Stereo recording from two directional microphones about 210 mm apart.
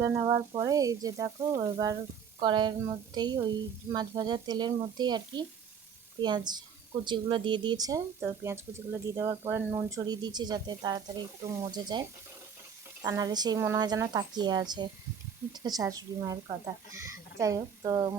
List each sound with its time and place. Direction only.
0.0 s speech: 15° right (ahead or behind)